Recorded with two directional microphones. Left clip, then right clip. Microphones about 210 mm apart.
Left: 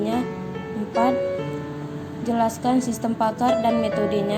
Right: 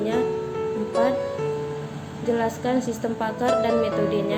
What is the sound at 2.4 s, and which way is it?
A woman's voice, 30° left (ahead or behind).